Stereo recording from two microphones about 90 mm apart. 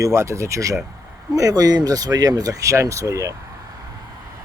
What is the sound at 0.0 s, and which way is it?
Speech, 35° right (ahead or behind).